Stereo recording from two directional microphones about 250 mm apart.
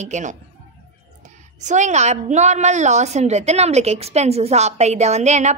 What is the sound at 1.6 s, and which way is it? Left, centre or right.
A woman's voice, right.